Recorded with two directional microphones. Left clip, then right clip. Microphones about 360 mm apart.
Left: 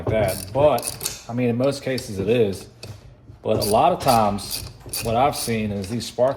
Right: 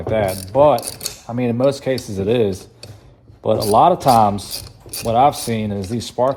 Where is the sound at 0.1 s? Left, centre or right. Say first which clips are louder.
Right 6 dB; right.